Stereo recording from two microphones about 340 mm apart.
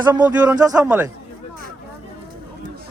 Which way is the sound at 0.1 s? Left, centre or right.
Centre.